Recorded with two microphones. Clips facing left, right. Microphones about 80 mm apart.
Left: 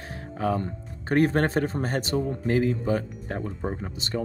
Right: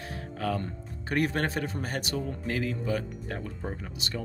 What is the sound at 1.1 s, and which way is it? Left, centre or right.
A man's voice, left.